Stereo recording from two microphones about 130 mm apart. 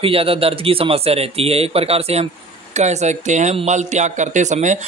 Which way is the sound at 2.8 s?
60° right (ahead or behind).